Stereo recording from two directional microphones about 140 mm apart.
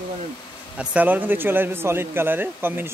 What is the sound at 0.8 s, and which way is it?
A man's voice, 10° right (ahead or behind).